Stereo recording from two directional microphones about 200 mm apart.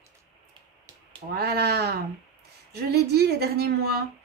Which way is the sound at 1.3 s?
55° right (ahead or behind).